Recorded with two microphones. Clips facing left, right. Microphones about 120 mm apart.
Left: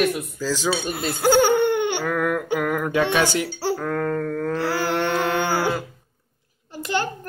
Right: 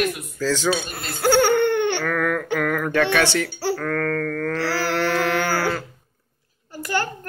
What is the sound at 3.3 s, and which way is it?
Mantra, 15° left (ahead or behind).